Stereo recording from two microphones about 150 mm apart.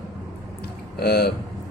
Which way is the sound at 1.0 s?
90° left.